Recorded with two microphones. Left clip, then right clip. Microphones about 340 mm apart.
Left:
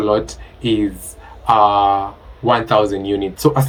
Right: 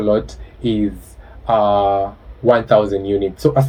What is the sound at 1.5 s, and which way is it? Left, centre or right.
Speech, left.